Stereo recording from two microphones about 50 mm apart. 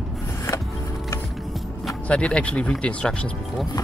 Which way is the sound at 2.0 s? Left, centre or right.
Left.